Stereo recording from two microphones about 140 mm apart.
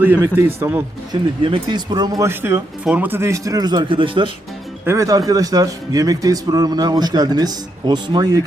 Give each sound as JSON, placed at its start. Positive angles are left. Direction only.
{"t": 0.0, "sound": "a man's voice", "side_deg": -15}
{"t": 1.1, "sound": "a man's voice", "side_deg": -35}
{"t": 4.9, "sound": "a man's voice", "side_deg": -25}